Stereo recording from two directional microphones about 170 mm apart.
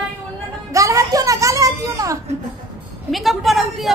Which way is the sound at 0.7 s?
20° right (ahead or behind).